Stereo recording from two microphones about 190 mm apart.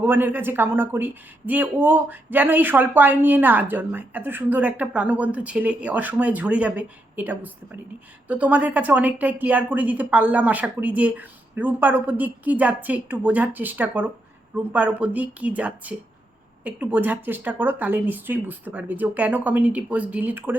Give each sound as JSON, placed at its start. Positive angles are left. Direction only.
{"t": 0.0, "sound": "a woman's voice", "side_deg": -10}